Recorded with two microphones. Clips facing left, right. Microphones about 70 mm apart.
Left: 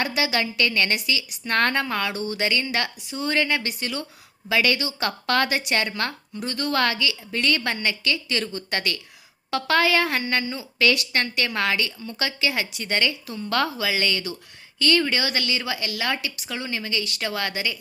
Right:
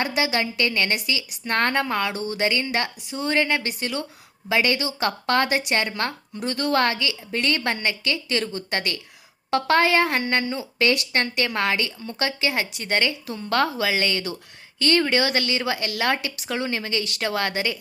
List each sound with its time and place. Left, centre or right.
0.0 s a woman's voice: right
2.4 s a woman's voice: right
6.4 s a woman's voice: right